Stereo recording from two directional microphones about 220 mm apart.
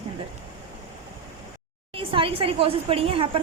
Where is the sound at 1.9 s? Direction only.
25° right (ahead or behind).